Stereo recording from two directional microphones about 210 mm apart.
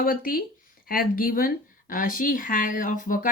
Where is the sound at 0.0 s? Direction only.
40° left (ahead or behind).